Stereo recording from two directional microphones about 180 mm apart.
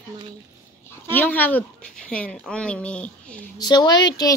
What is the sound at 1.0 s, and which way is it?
A woman's voice, 10° left (ahead or behind).